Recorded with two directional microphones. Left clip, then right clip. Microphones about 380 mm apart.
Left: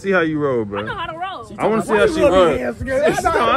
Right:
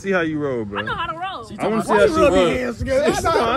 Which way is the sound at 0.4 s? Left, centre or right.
Left.